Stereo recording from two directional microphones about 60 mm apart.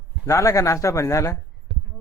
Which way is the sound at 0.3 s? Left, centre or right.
Left.